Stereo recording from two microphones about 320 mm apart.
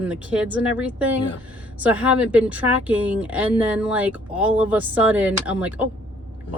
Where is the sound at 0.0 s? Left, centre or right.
Centre.